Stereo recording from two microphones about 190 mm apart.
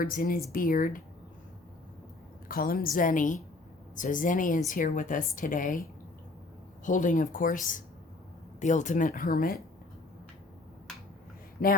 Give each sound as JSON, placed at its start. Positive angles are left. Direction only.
{"t": 0.0, "sound": "speech", "side_deg": 45}
{"t": 2.5, "sound": "speech", "side_deg": 50}
{"t": 6.8, "sound": "speech", "side_deg": 45}
{"t": 11.6, "sound": "speech", "side_deg": 55}